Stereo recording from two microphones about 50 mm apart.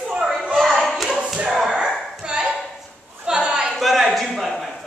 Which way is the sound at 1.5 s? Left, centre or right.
Centre.